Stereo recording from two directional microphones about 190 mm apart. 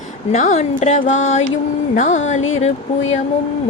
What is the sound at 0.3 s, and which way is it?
Speech, 40° left (ahead or behind).